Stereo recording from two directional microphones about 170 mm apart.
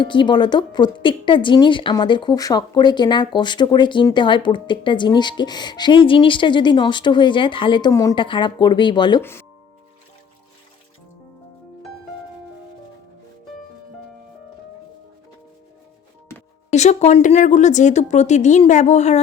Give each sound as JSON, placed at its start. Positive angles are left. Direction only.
{"t": 0.0, "sound": "a woman's voice", "side_deg": 30}
{"t": 9.2, "sound": "speech", "side_deg": 15}
{"t": 16.3, "sound": "music", "side_deg": 15}
{"t": 16.7, "sound": "speech", "side_deg": 40}